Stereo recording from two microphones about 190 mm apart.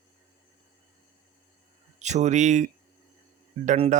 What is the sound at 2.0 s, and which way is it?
Speech, 40° right (ahead or behind).